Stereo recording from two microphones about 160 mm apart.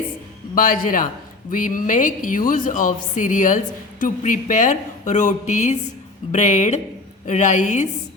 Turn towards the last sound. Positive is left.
turn(degrees=50)  # may be behind; listen again after turning